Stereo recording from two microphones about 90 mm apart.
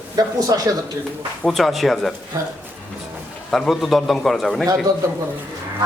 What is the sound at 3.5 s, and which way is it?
A man's voice, centre (ahead or behind).